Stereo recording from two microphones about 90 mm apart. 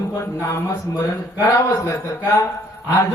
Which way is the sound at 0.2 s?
30° left (ahead or behind).